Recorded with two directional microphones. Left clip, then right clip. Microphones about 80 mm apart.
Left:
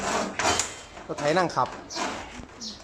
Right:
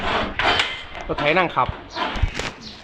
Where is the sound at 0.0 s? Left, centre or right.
Left.